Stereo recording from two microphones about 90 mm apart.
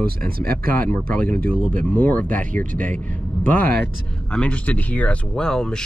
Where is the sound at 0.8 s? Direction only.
20° left (ahead or behind).